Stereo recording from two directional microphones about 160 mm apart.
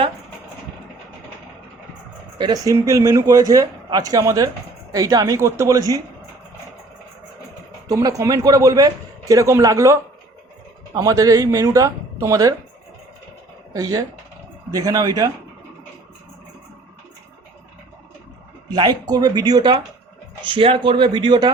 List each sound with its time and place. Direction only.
2.4 s a man's voice: 20° right (ahead or behind)
7.9 s a man's voice: 20° right (ahead or behind)
13.7 s a man's voice: 20° right (ahead or behind)
18.7 s a man's voice: 25° right (ahead or behind)